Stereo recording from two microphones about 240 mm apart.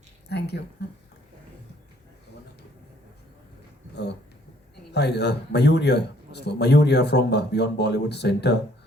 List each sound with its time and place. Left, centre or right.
0.3 s a man's voice: left
4.9 s a man's voice: left